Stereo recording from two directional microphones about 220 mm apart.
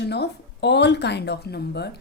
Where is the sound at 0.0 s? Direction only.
50° left (ahead or behind).